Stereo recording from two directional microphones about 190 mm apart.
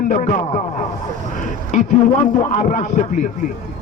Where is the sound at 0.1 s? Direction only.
40° left (ahead or behind).